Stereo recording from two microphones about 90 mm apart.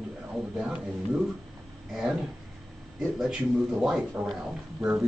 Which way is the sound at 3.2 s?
5° right (ahead or behind).